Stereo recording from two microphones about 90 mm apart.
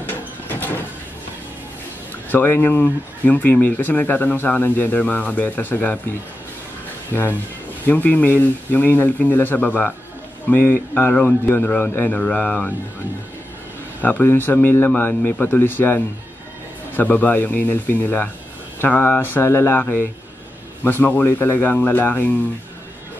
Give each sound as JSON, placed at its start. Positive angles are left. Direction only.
{"t": 2.3, "sound": "speech", "side_deg": 25}
{"t": 7.1, "sound": "speech", "side_deg": 25}
{"t": 14.0, "sound": "speech", "side_deg": 20}